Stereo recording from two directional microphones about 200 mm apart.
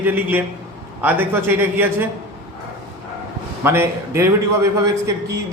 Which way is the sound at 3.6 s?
10° right (ahead or behind).